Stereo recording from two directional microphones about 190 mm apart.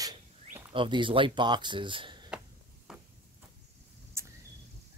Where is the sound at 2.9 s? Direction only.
5° right (ahead or behind).